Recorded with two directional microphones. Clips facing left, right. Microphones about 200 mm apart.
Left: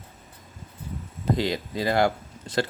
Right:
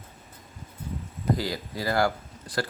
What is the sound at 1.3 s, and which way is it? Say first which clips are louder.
Speech: left 4 dB; 20° left (ahead or behind).